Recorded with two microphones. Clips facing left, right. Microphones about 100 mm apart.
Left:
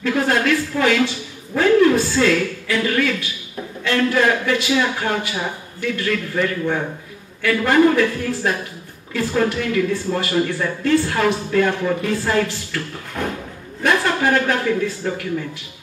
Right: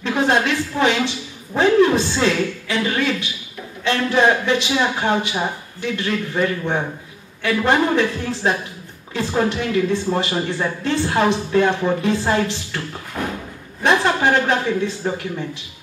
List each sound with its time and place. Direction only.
0.0 s a woman's voice: 20° right (ahead or behind)
13.2 s a sound: 10° right (ahead or behind)
13.8 s speech: 20° right (ahead or behind)